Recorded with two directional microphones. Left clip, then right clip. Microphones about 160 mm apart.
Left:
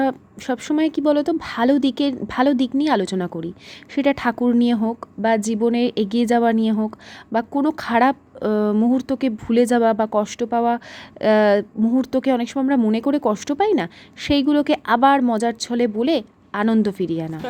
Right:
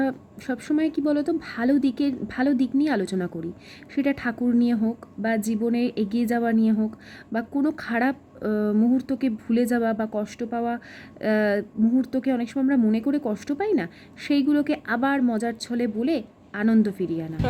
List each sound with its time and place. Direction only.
0.0 s speech: 30° left (ahead or behind)